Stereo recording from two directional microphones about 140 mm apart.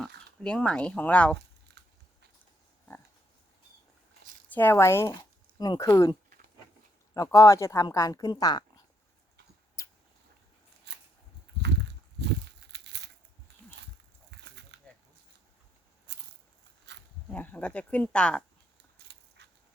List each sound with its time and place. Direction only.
0.0 s speech: 5° left (ahead or behind)
4.5 s speech: 15° left (ahead or behind)
9.8 s a sound: 20° left (ahead or behind)
17.2 s speech: 10° left (ahead or behind)